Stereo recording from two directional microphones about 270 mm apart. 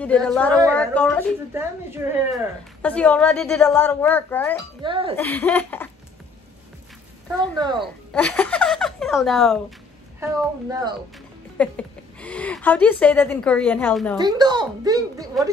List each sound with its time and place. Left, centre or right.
0.0 s speech: centre
1.5 s a child's voice: centre
2.8 s speech: centre
4.8 s speech: centre
5.1 s speech: centre
7.5 s a child's voice: centre
7.8 s speech: centre
10.7 s a child's voice: centre
11.5 s speech: centre
14.1 s a child's voice: centre